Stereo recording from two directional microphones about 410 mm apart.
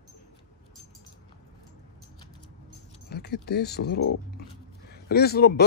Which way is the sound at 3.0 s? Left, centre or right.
Left.